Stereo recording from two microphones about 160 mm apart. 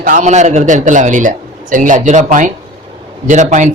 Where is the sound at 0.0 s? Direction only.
50° right (ahead or behind).